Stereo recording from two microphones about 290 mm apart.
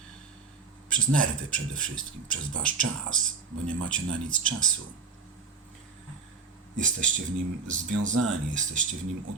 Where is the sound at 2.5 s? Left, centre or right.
Right.